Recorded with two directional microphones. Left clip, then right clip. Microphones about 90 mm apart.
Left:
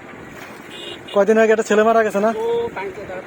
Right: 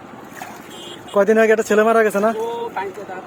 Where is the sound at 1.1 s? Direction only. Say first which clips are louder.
Even; 35° right (ahead or behind).